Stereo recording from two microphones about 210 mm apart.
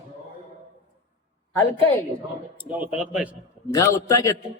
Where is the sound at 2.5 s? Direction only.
5° right (ahead or behind).